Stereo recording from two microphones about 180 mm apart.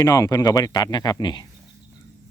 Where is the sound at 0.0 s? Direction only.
20° left (ahead or behind).